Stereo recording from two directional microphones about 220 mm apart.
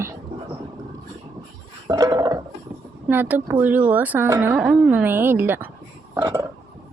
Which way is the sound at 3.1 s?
10° right (ahead or behind).